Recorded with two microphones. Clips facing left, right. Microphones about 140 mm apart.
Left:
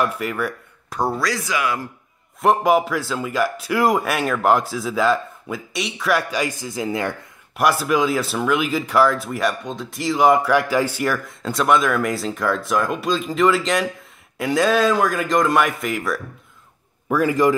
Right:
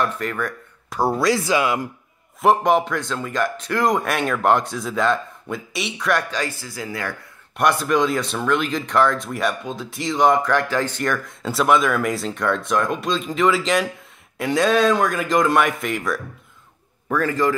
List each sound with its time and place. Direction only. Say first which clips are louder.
0.0 s speech: left 1 dB; 10° left (ahead or behind)
1.1 s speech: right 5 dB; 25° right (ahead or behind)
2.4 s speech: even; 5° left (ahead or behind); by 7.2 s 20° left (ahead or behind)
7.5 s speech: even; 5° left (ahead or behind)
17.1 s a man's voice: left 3 dB; 10° left (ahead or behind)